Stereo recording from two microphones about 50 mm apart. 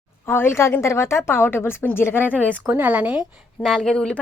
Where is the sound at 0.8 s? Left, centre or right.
Left.